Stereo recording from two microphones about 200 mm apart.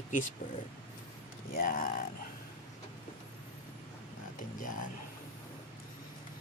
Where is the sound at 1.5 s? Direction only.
45° left (ahead or behind).